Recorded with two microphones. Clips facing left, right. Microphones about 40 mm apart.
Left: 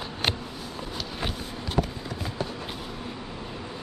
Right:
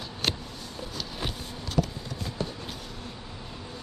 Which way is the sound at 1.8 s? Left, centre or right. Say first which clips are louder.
Left 1 dB; left.